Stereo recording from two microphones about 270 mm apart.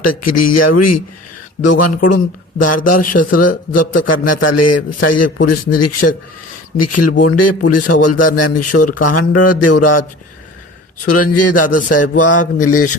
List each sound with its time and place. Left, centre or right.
0.1 s a man's voice: left